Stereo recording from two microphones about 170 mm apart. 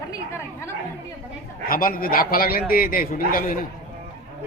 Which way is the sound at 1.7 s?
55° left (ahead or behind).